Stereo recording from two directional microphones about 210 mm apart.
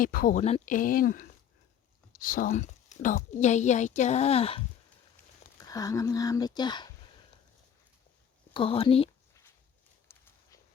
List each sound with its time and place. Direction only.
0.0 s speech: 40° left (ahead or behind)
5.5 s speech: 15° left (ahead or behind)
8.5 s speech: 25° left (ahead or behind)